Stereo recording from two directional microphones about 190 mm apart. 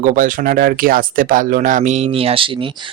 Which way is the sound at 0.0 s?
45° right (ahead or behind).